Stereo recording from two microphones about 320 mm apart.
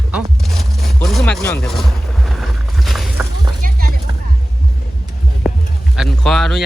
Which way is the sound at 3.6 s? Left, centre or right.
Right.